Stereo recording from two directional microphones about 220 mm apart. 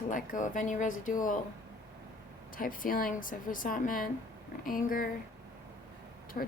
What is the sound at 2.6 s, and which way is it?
Speech, 40° left (ahead or behind).